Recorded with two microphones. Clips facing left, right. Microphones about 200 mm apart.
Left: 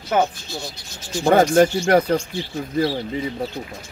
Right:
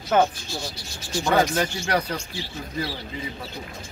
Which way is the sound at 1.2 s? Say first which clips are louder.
Left 8 dB; 45° left (ahead or behind).